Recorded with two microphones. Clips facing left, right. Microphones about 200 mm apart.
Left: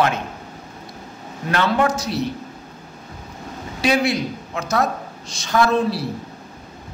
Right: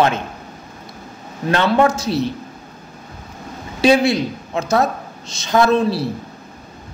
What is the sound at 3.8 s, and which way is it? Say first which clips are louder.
A woman's voice: right 5 dB; 25° right (ahead or behind).